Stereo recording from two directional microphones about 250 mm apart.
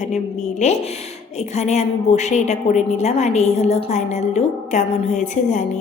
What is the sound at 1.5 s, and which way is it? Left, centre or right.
A woman's voice, left.